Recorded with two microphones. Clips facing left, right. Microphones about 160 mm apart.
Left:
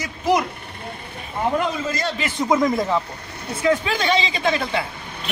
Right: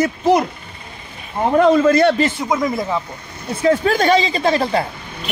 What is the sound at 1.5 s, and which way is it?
Speech, 65° right (ahead or behind).